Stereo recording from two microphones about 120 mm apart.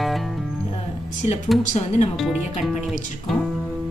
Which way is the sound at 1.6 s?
85° left.